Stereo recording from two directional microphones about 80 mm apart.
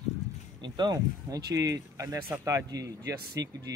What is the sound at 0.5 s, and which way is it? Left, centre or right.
A man's voice, right.